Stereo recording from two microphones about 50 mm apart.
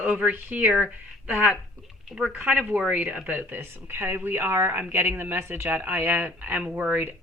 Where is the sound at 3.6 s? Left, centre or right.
Right.